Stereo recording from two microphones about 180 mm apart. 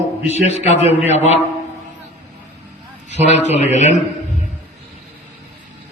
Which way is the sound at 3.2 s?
40° left (ahead or behind).